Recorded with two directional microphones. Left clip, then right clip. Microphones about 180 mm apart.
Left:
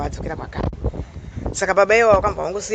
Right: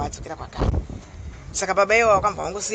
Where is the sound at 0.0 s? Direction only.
55° left (ahead or behind).